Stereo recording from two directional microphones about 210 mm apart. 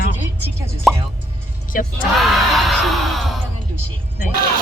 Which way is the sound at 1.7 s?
45° left (ahead or behind).